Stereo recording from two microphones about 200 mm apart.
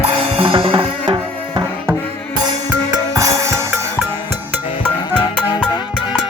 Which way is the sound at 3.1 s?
15° right (ahead or behind).